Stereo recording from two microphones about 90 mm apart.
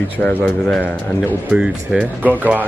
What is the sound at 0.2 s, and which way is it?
Speech, 15° left (ahead or behind).